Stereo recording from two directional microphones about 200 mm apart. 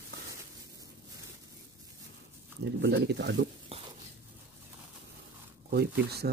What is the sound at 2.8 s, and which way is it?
Speech, 55° right (ahead or behind).